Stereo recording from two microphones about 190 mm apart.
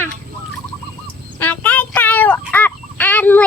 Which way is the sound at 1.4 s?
10° left (ahead or behind).